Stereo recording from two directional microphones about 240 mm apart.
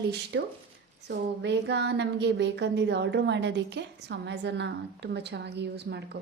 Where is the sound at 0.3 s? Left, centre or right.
Right.